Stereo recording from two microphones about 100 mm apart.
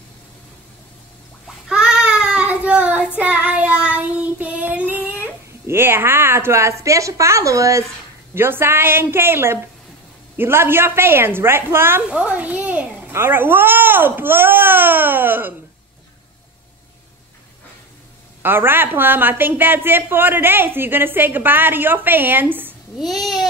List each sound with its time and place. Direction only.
1.7 s child singing: 10° right (ahead or behind)
5.7 s a woman's voice: 25° right (ahead or behind)
18.4 s a woman's voice: 20° right (ahead or behind)